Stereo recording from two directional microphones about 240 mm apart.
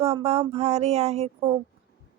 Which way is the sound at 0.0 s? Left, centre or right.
Right.